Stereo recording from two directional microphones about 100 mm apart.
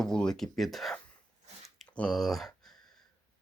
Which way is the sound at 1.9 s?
10° left (ahead or behind).